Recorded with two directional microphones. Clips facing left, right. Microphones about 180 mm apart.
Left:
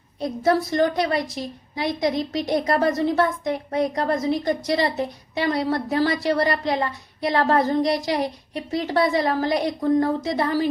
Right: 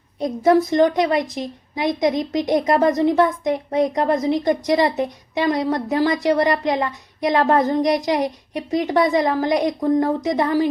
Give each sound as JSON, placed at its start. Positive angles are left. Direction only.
{"t": 0.2, "sound": "a woman's voice", "side_deg": -20}